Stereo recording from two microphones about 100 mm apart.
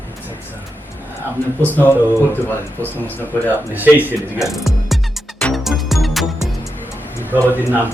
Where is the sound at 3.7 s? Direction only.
20° right (ahead or behind).